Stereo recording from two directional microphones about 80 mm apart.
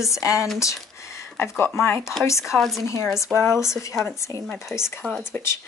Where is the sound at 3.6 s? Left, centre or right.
Left.